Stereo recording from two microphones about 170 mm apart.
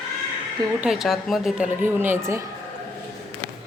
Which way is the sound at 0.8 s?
Centre (ahead or behind).